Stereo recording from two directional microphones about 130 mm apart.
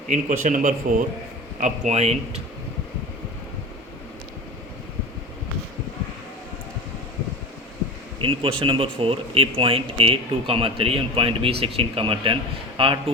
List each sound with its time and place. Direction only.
0.1 s speech: 80° right
1.5 s speech: 70° right (ahead or behind); by 2.4 s 55° right (ahead or behind)
8.2 s speech: 45° right (ahead or behind)